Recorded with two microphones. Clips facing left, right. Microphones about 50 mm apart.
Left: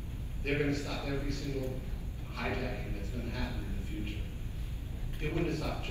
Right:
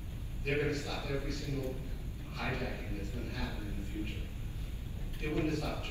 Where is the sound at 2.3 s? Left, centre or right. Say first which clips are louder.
Left 2 dB; left.